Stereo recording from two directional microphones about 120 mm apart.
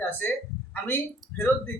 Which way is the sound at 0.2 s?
15° left (ahead or behind).